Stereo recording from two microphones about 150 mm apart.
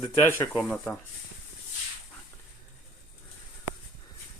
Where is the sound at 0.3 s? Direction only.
15° left (ahead or behind).